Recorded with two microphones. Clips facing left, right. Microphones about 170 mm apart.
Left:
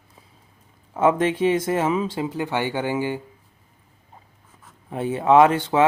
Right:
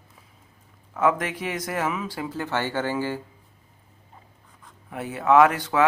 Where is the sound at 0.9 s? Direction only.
25° left (ahead or behind).